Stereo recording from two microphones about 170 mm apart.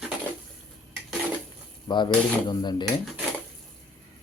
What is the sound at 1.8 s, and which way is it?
Speech, 25° left (ahead or behind).